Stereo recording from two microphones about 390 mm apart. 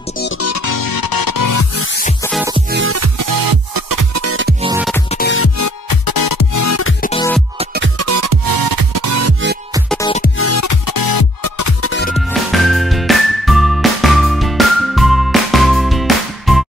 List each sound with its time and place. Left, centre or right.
0.2 s music: left
1.8 s music: left
2.7 s music: right
3.2 s music: right
4.6 s music: centre
5.1 s music: left
5.6 s music: left
7.0 s music: centre
7.5 s music: right
8.0 s music: right
9.9 s music: centre
10.2 s music: left
11.8 s music: left
12.3 s music: centre